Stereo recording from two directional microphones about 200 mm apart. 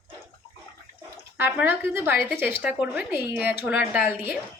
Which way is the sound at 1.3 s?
10° right (ahead or behind).